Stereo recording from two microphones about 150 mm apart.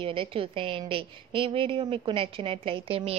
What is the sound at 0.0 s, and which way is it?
A woman's voice, 35° right (ahead or behind).